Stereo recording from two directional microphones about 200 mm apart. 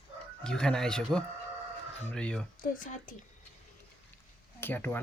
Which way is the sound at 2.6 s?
40° left (ahead or behind).